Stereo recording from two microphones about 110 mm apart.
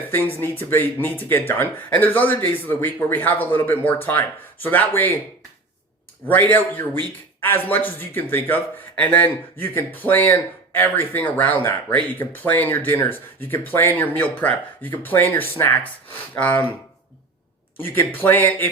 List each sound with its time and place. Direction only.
0.3 s a man's voice: 20° left (ahead or behind)
6.2 s a man's voice: 15° left (ahead or behind)
17.7 s speech: 20° left (ahead or behind)